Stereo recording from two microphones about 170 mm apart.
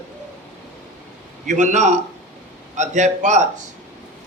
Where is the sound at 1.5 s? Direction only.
45° right (ahead or behind).